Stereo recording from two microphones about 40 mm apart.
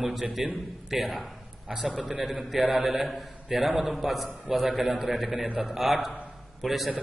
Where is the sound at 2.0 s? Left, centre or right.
Right.